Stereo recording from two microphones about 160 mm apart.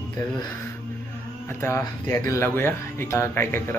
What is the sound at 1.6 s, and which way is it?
Speech, 15° left (ahead or behind).